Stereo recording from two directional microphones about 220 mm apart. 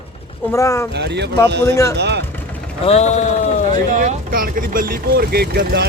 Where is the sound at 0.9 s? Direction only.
50° right (ahead or behind).